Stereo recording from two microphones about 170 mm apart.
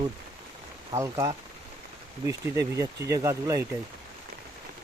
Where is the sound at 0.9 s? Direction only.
15° right (ahead or behind).